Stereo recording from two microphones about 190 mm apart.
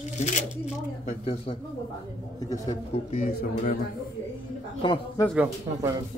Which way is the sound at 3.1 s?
45° left (ahead or behind).